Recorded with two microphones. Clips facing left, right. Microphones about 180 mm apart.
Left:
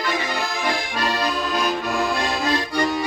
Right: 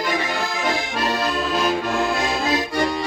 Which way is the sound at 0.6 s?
5° right (ahead or behind).